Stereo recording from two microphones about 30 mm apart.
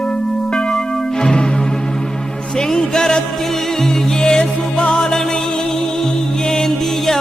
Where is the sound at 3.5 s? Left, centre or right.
Centre.